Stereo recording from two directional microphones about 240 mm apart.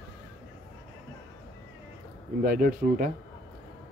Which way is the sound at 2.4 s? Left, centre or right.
Right.